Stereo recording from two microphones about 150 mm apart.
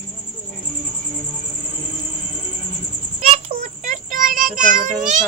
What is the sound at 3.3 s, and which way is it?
Child singing, 50° right (ahead or behind).